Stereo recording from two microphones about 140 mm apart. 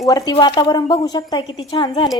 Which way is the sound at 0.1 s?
30° left (ahead or behind).